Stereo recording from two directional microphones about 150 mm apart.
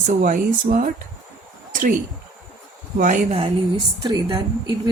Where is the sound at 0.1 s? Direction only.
60° right (ahead or behind).